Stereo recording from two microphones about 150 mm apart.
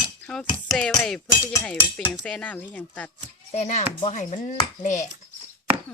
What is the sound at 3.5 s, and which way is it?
Speech, 50° left (ahead or behind).